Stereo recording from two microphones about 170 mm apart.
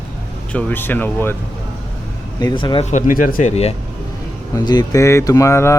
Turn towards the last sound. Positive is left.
turn(degrees=15)  # may be behind; listen again after turning